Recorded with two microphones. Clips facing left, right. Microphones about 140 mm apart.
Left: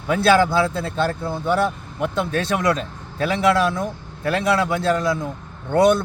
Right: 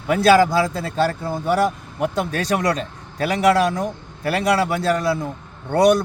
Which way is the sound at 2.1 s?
35° right (ahead or behind).